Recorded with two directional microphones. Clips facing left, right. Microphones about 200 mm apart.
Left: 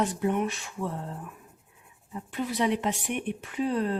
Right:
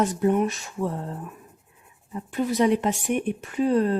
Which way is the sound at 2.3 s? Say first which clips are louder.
Right 6 dB; 45° right (ahead or behind).